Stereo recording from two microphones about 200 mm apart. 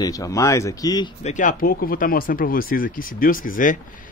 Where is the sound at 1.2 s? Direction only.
40° left (ahead or behind).